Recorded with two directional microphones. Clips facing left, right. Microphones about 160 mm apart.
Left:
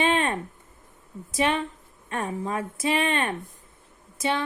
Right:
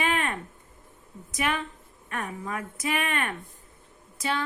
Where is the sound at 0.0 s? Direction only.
30° left (ahead or behind).